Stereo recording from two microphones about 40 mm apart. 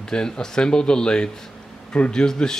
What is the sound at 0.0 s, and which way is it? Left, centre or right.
Speech, centre.